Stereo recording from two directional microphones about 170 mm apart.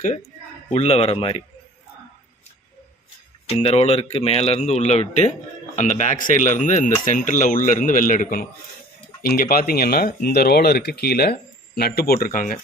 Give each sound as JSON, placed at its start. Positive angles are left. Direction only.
{"t": 0.7, "sound": "speech", "side_deg": 40}
{"t": 3.4, "sound": "speech", "side_deg": 35}